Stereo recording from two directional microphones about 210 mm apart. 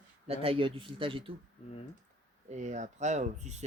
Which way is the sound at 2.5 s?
35° right (ahead or behind).